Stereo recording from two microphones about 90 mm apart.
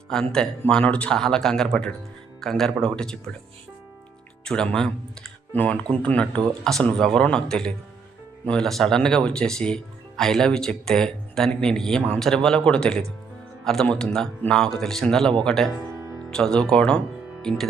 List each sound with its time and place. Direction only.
0.1 s speech: 5° left (ahead or behind)
4.4 s speech: 10° left (ahead or behind)